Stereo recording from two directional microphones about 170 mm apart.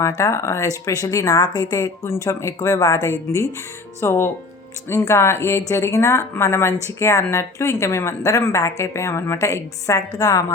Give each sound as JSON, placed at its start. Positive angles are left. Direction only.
{"t": 0.0, "sound": "a woman's voice", "side_deg": 15}